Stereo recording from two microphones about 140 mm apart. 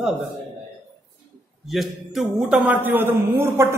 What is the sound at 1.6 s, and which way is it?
Speech, centre (ahead or behind).